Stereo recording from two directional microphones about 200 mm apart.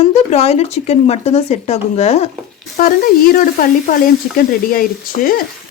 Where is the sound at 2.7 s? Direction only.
45° left (ahead or behind).